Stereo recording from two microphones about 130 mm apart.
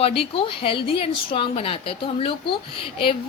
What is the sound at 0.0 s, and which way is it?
Speech, 45° left (ahead or behind).